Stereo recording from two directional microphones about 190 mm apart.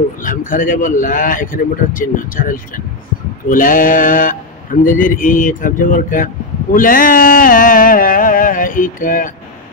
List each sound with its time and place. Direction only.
0.2 s speech: 45° left (ahead or behind)